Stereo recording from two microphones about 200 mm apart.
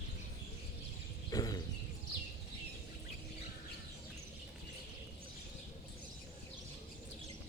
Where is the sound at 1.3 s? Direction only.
20° left (ahead or behind).